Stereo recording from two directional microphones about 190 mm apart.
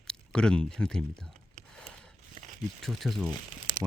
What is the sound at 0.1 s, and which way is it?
Speech, 5° left (ahead or behind).